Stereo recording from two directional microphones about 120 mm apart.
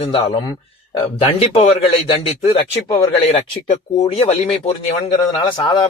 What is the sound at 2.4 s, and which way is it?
Speech, 55° left (ahead or behind).